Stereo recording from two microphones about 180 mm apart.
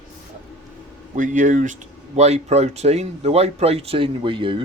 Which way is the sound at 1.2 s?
45° right (ahead or behind).